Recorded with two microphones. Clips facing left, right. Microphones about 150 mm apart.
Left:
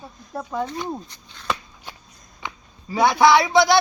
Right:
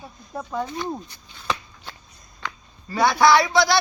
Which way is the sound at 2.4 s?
20° left (ahead or behind).